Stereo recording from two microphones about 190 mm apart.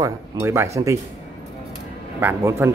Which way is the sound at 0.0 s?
15° right (ahead or behind).